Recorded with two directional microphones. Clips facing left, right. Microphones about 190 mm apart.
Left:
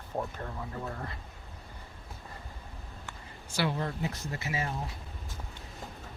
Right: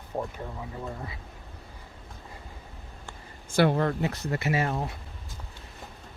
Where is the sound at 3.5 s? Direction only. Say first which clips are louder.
Right 9 dB; 55° right (ahead or behind); by 5.0 s 70° right (ahead or behind).